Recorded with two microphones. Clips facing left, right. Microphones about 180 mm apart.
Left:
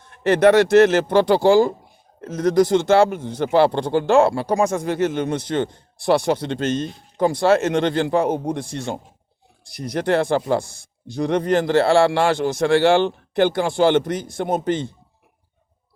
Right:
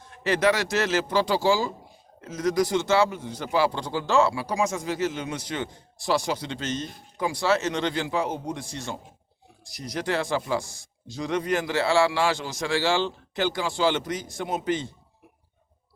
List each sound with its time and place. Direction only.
0.0 s speech: 55° left (ahead or behind)